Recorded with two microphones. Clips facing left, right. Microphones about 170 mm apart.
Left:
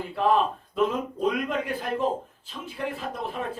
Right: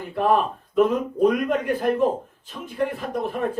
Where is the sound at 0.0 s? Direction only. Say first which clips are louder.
Right 2 dB; 55° right (ahead or behind).